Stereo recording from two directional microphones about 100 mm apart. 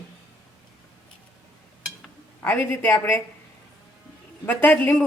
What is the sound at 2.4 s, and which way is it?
Speech, 20° left (ahead or behind).